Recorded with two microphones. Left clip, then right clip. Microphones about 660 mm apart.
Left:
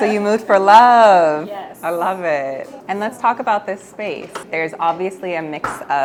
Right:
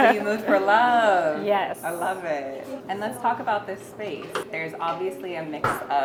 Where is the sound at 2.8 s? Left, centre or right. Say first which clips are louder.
Left 8 dB; left.